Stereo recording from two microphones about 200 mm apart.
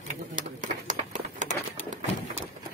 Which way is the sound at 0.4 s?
40° right (ahead or behind).